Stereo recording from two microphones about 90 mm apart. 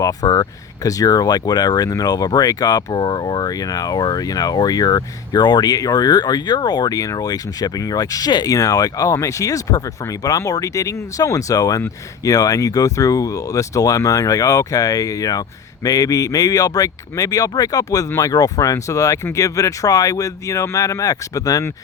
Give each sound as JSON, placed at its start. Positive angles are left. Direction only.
{"t": 0.0, "sound": "speech", "side_deg": 45}